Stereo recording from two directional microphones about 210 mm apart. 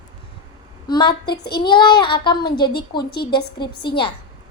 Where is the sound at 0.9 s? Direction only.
20° left (ahead or behind).